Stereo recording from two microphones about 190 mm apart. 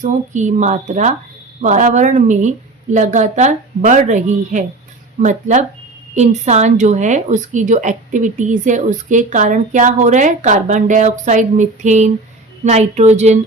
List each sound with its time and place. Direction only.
0.0 s a woman's voice: 40° right (ahead or behind)